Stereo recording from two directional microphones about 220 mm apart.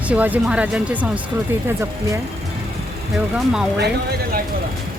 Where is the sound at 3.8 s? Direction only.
45° right (ahead or behind).